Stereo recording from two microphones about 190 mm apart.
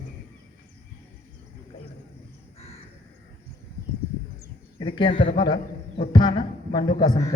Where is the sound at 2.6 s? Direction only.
30° left (ahead or behind).